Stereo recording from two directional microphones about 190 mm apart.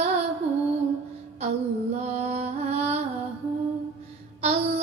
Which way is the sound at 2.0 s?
35° right (ahead or behind).